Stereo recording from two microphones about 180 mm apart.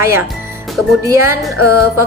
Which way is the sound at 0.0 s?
15° right (ahead or behind).